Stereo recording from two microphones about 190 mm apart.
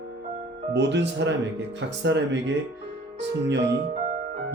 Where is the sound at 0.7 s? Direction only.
65° right (ahead or behind).